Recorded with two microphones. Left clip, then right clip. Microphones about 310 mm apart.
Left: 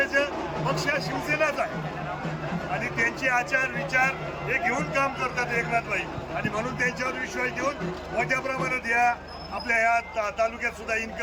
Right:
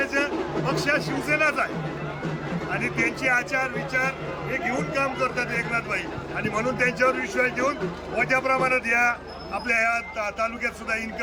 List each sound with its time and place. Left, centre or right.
0.0 s a sound: centre
0.9 s a man's voice: centre
3.0 s a man's voice: centre